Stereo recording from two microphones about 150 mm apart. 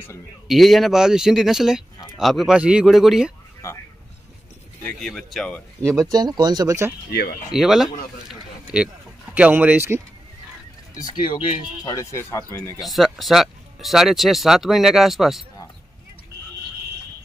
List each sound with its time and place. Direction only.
0.5 s speech: centre (ahead or behind)
4.8 s speech: centre (ahead or behind)
5.8 s speech: 20° right (ahead or behind)
7.1 s speech: 90° left
7.5 s speech: centre (ahead or behind)
8.3 s a sound: 5° right (ahead or behind)
11.0 s speech: 30° left (ahead or behind)
12.8 s speech: centre (ahead or behind)